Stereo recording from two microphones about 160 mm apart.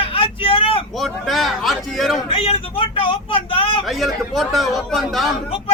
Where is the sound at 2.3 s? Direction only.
35° left (ahead or behind).